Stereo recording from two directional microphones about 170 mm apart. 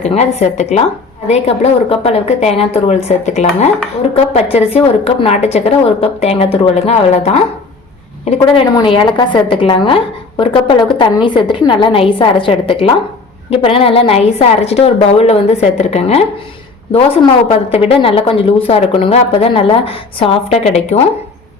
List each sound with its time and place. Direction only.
0.0 s a woman's voice: 40° left (ahead or behind)